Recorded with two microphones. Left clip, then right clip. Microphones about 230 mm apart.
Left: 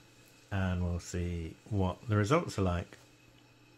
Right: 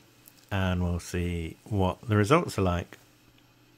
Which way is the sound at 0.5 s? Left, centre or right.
Right.